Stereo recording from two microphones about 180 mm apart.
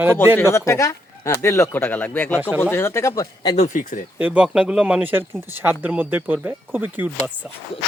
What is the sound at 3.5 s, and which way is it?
Speech, 45° left (ahead or behind).